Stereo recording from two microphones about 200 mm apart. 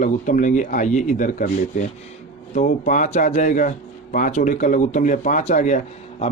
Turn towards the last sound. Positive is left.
turn(degrees=35)  # may be behind; listen again after turning